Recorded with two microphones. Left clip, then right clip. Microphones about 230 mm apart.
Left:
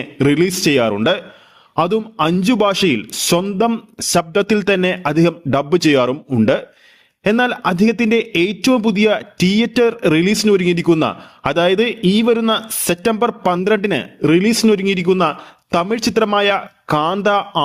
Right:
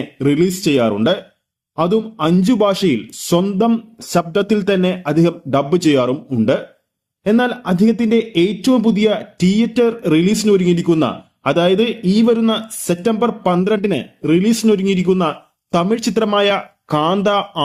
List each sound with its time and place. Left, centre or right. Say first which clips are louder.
0.0 s a man's voice: left 1 dB; left